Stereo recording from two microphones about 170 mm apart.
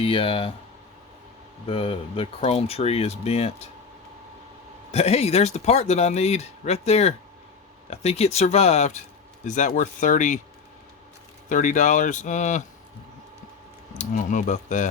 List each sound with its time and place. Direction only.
0.0 s speech: 30° left (ahead or behind)
1.6 s speech: 35° left (ahead or behind)
4.9 s speech: 40° left (ahead or behind)
11.4 s speech: 50° left (ahead or behind)
14.0 s speech: 50° left (ahead or behind)